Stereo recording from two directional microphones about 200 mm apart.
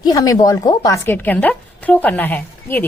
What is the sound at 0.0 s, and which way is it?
Speech, 15° left (ahead or behind).